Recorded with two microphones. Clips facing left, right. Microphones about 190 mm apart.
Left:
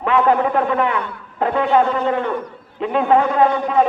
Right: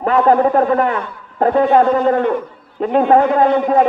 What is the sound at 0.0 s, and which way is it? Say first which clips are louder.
A man's voice: right 4 dB; 40° right (ahead or behind).